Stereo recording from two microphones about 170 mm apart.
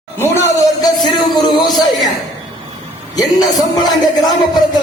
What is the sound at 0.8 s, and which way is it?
Speech, 25° left (ahead or behind).